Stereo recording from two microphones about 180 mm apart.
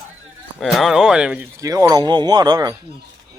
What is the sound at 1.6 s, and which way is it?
Speech, 20° right (ahead or behind).